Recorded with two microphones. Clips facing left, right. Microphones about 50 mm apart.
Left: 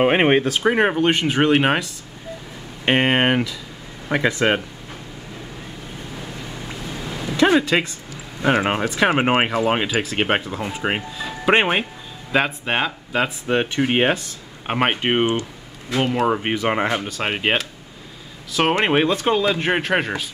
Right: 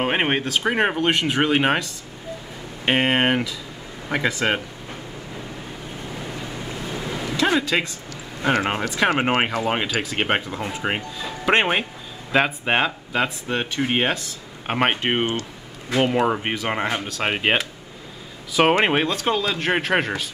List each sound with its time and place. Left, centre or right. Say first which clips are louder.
0.0 s speech: left 6 dB; centre
0.6 s speech: left 3 dB; centre
7.3 s a sound: left 4 dB; centre
8.1 s speech: left 3 dB; centre
13.5 s speech: left 4 dB; left
14.7 s speech: left 1 dB; centre
15.9 s speech: even; centre
16.5 s speech: left 4 dB; centre
18.9 s speech: left 3 dB; centre
19.7 s speech: left 1 dB; centre